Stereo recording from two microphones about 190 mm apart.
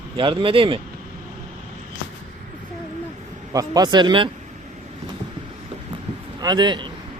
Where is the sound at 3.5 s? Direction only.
20° right (ahead or behind).